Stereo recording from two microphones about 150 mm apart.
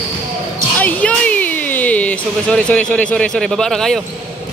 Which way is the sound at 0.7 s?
10° left (ahead or behind).